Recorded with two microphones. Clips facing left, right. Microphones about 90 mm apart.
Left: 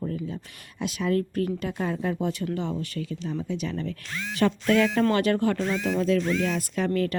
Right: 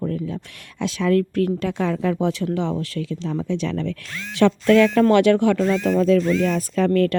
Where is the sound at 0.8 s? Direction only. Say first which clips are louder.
Right 6 dB; 90° right.